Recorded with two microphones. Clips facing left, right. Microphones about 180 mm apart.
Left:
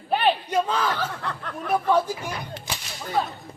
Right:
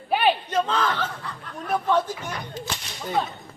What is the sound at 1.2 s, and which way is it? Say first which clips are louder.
Snicker: left 5 dB; 65° left (ahead or behind).